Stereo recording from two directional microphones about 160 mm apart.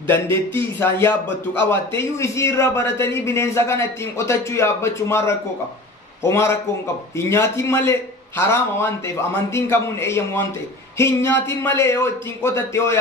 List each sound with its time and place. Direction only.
0.0 s a man's voice: 15° left (ahead or behind)